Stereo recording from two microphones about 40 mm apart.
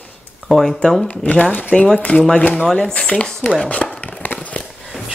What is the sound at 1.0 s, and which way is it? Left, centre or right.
Speech, left.